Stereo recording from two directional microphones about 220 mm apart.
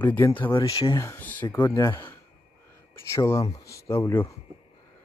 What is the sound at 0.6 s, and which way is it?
Speech, 20° left (ahead or behind).